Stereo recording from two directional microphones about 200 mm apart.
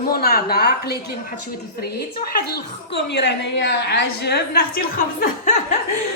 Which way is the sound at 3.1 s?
60° left (ahead or behind).